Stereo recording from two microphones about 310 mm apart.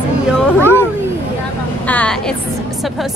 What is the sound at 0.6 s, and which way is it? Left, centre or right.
Speech, centre.